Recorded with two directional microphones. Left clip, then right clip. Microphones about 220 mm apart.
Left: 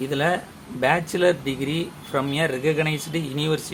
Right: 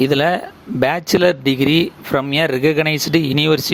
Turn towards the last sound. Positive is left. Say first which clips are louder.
# right 10 dB
turn(degrees=-40)  # may be behind; listen again after turning